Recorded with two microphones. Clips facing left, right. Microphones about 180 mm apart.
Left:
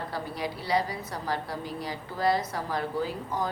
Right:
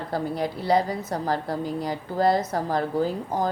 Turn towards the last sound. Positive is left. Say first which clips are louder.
# right 6 dB
turn(degrees=-45)  # may be behind; listen again after turning